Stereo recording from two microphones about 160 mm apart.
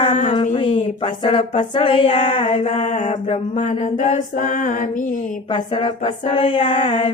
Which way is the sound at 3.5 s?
50° left (ahead or behind).